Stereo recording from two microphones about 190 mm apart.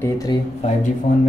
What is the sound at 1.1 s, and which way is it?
Speech, 40° left (ahead or behind).